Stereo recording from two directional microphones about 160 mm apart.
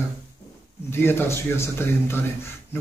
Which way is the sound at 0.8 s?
15° left (ahead or behind).